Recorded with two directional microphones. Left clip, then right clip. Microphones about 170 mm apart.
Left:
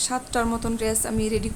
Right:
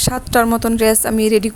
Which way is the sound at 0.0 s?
50° right (ahead or behind).